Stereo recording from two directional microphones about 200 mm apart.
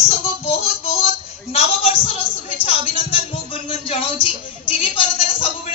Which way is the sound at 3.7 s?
30° left (ahead or behind).